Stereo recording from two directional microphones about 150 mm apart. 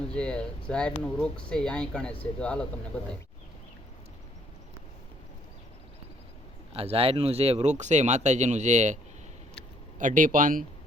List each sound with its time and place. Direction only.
0.1 s speech: 5° left (ahead or behind)
6.7 s speech: 40° right (ahead or behind)
10.0 s speech: 60° right (ahead or behind)